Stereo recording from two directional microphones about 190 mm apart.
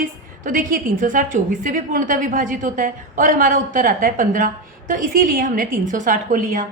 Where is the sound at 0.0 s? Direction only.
45° right (ahead or behind).